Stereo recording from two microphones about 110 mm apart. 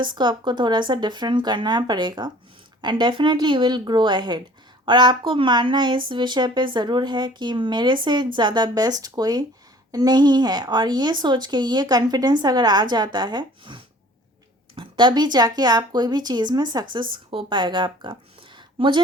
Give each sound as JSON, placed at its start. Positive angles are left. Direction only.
{"t": 0.0, "sound": "speech", "side_deg": -45}